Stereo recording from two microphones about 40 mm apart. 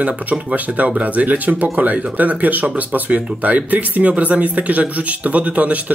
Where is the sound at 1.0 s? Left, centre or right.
Right.